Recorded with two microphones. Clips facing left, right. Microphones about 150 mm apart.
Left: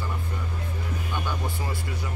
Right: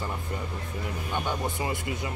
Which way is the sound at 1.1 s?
20° right (ahead or behind).